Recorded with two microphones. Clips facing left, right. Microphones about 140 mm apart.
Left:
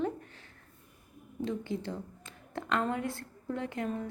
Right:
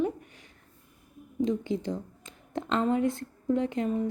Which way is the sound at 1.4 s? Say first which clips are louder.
Right 6 dB; 20° right (ahead or behind).